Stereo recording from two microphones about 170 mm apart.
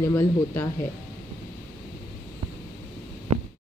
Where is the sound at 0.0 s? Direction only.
15° left (ahead or behind).